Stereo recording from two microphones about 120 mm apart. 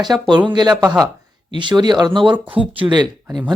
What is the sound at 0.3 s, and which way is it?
Speech, 35° right (ahead or behind).